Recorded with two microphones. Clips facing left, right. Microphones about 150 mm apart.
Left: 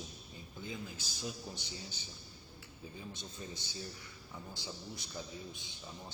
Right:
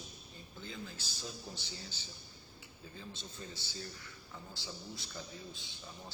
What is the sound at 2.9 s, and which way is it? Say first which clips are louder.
A man's voice: left 1 dB; 15° left (ahead or behind).